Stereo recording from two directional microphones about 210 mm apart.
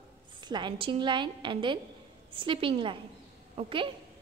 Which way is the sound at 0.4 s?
20° right (ahead or behind).